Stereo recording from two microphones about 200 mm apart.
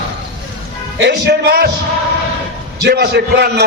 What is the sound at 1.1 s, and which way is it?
Speech, 55° right (ahead or behind).